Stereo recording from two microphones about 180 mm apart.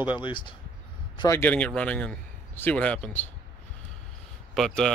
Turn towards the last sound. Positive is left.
turn(degrees=5)  # may be behind; listen again after turning